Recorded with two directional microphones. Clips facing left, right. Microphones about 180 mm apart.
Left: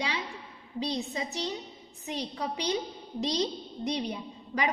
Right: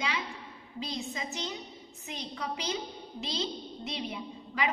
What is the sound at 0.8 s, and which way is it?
A woman's voice, 35° left (ahead or behind).